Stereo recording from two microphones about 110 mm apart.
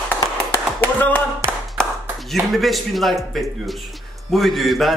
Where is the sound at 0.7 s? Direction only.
15° left (ahead or behind).